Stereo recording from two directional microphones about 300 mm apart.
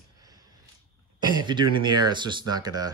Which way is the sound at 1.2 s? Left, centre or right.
Centre.